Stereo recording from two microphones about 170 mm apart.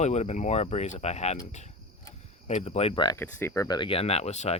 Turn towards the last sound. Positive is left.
turn(degrees=40)  # may be behind; listen again after turning